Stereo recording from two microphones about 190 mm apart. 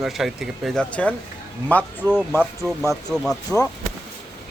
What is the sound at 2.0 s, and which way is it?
A man's voice, 5° right (ahead or behind).